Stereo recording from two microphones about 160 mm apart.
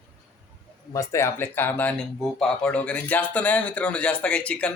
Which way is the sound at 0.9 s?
20° left (ahead or behind).